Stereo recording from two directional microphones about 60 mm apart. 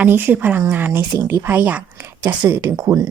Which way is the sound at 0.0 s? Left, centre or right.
Right.